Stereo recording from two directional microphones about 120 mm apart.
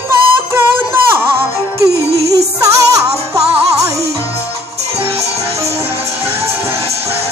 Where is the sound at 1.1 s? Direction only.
20° right (ahead or behind).